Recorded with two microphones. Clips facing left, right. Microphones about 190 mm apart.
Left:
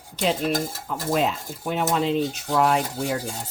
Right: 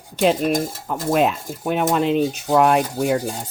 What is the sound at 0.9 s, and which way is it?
Speech, 60° right (ahead or behind).